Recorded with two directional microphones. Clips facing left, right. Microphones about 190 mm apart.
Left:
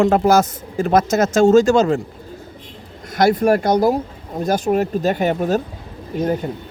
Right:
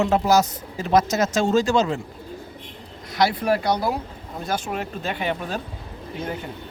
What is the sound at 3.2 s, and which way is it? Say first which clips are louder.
Speech: left 6 dB; 50° left (ahead or behind).